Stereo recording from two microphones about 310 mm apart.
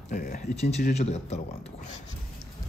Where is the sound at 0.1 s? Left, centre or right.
Left.